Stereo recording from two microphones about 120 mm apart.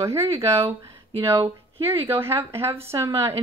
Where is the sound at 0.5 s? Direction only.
50° right (ahead or behind).